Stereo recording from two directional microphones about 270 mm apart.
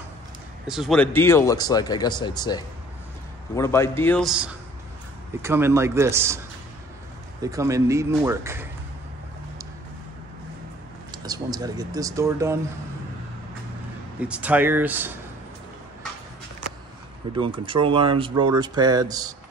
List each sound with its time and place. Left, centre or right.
0.7 s speech: centre
7.4 s speech: centre
11.2 s speech: centre
14.2 s speech: centre
17.4 s speech: centre